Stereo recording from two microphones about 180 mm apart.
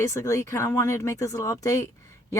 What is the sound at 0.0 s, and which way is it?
Speech, 15° left (ahead or behind).